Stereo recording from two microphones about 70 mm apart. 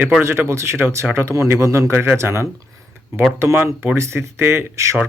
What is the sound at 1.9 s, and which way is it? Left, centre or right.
Speech, right.